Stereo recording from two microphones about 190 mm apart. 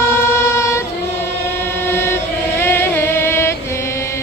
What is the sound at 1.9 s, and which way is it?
Chant, 10° left (ahead or behind).